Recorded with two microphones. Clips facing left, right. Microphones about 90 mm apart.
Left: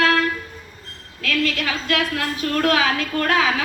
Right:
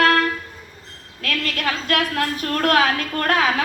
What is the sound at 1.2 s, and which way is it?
A woman's voice, 45° right (ahead or behind).